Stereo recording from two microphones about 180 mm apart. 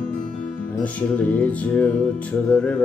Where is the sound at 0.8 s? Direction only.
10° left (ahead or behind).